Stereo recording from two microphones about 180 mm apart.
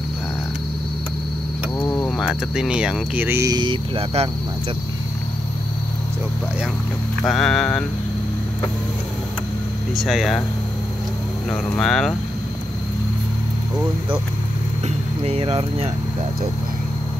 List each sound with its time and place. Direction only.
1.8 s a sound: 20° left (ahead or behind)
2.0 s speech: centre (ahead or behind); by 4.3 s 30° right (ahead or behind)
7.2 s speech: centre (ahead or behind)
9.9 s speech: centre (ahead or behind)
11.5 s speech: 5° left (ahead or behind)
15.2 s speech: 30° right (ahead or behind)